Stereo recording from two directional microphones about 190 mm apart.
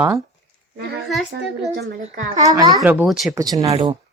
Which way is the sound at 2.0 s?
45° right (ahead or behind).